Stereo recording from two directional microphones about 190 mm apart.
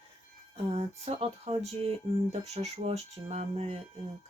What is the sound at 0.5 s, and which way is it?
Speech, 30° right (ahead or behind).